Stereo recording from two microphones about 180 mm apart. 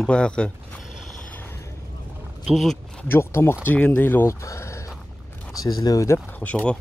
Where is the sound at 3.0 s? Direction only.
15° left (ahead or behind).